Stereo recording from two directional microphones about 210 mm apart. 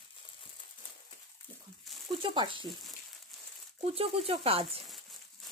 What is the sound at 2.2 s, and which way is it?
Speech, 25° right (ahead or behind).